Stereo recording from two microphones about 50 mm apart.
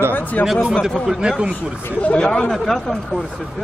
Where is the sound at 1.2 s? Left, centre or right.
Centre.